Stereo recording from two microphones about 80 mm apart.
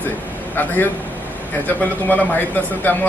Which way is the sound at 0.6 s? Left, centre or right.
Left.